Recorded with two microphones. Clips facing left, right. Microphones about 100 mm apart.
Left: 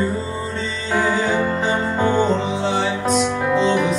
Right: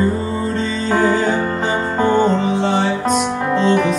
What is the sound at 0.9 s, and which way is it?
Music, 45° right (ahead or behind).